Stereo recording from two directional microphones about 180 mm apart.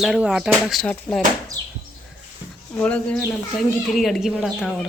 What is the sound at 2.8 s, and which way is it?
Speech, 5° left (ahead or behind).